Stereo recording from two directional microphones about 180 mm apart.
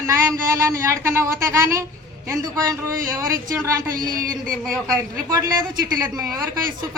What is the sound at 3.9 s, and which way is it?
Speech, 50° right (ahead or behind).